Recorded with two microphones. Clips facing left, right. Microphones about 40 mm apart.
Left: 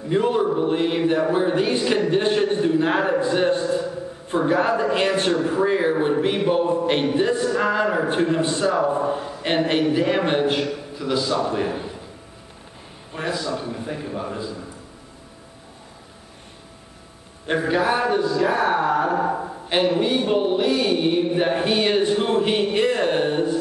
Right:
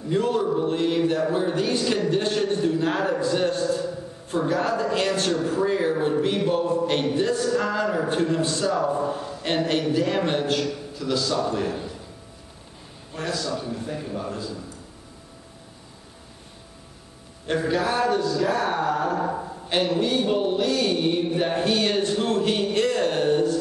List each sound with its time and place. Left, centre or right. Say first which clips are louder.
0.1 s a man's voice: left 3 dB; left
13.1 s a man's voice: left 2 dB; left
17.5 s a man's voice: left 3 dB; centre